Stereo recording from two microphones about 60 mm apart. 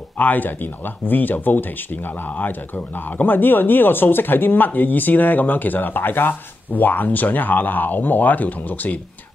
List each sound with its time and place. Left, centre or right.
0.2 s speech: left